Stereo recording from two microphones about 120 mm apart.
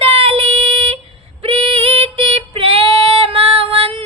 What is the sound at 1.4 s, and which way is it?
Female singing, 50° right (ahead or behind).